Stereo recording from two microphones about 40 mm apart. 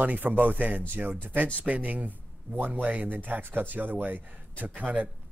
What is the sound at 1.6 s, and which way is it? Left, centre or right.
Speech, right.